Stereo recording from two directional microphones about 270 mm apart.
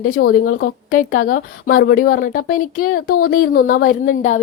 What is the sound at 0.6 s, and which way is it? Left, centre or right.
A woman's voice, left.